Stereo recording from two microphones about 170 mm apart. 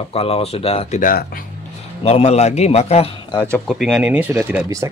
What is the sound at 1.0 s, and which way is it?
Speech, 55° left (ahead or behind).